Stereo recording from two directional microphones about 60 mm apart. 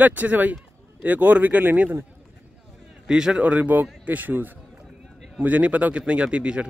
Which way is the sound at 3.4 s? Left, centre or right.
Right.